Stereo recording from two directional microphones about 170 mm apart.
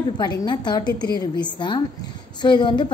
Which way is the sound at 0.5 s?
25° left (ahead or behind).